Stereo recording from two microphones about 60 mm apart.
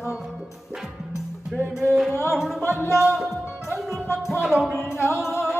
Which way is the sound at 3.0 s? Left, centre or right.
Centre.